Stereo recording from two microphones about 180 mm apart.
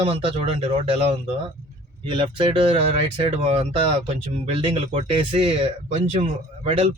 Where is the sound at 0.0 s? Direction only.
35° right (ahead or behind).